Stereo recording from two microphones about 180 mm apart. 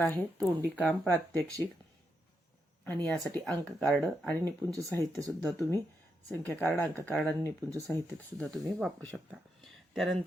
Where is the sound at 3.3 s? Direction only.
5° left (ahead or behind).